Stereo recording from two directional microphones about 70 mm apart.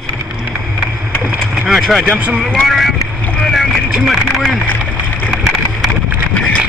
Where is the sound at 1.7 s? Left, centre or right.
Centre.